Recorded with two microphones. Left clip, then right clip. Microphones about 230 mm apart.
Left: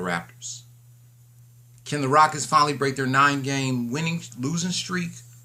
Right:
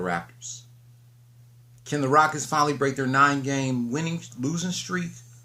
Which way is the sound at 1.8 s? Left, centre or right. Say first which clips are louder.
Left 2 dB; centre.